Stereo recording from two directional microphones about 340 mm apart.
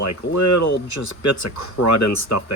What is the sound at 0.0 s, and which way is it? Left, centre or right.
Speech, left.